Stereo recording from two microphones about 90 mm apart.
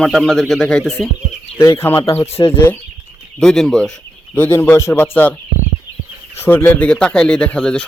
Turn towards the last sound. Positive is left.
turn(degrees=10)  # may be behind; listen again after turning